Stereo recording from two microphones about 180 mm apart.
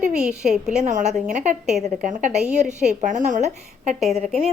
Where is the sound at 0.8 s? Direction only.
40° right (ahead or behind).